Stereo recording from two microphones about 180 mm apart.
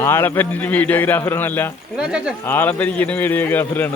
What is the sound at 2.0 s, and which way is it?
Speech, 5° right (ahead or behind).